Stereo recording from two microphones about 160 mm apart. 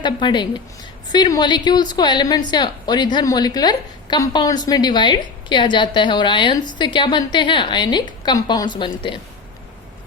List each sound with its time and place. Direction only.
0.0 s a woman's voice: 30° left (ahead or behind)